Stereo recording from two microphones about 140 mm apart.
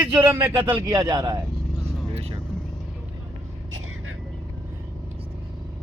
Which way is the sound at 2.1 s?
45° right (ahead or behind).